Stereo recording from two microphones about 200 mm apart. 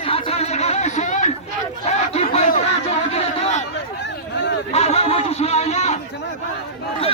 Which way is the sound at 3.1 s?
35° left (ahead or behind).